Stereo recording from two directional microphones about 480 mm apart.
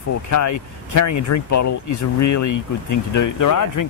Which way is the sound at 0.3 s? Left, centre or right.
Left.